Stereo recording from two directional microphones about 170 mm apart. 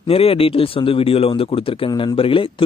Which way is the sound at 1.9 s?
20° left (ahead or behind).